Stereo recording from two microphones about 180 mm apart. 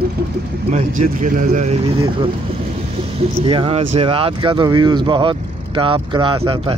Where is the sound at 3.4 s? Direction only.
30° right (ahead or behind).